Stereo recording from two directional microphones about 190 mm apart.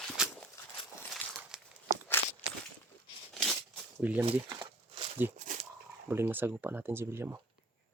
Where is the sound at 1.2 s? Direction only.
10° left (ahead or behind).